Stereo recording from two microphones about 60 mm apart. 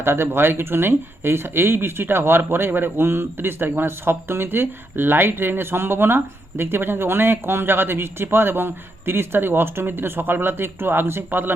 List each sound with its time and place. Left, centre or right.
0.0 s speech: right